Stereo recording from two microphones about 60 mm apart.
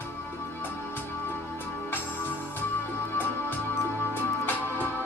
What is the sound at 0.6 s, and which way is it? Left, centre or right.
Music, left.